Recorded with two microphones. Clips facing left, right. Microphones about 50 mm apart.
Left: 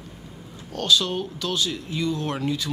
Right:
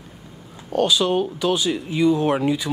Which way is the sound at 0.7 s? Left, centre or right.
Centre.